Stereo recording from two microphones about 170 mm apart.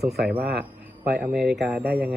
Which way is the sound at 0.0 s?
Centre (ahead or behind).